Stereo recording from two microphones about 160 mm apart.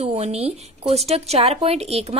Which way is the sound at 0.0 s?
40° right (ahead or behind).